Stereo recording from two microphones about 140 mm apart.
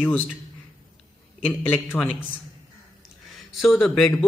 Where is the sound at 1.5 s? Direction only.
15° left (ahead or behind).